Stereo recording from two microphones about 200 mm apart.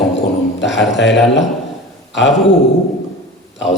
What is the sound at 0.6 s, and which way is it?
Speech, 65° left (ahead or behind).